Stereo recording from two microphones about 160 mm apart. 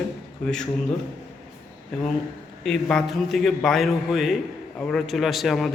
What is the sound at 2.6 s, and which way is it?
A man's voice, 5° left (ahead or behind).